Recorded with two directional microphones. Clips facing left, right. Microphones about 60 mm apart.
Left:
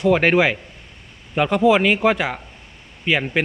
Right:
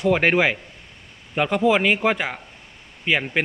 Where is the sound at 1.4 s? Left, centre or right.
Centre.